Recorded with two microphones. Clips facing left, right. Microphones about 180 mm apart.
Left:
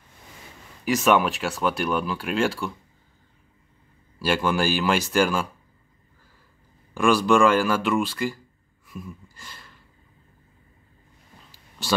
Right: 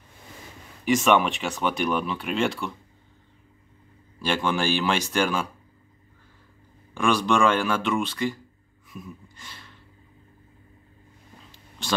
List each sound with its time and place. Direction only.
0.8 s speech: centre (ahead or behind)
4.2 s speech: 5° left (ahead or behind)
6.9 s speech: 5° left (ahead or behind)
8.8 s a sound: centre (ahead or behind)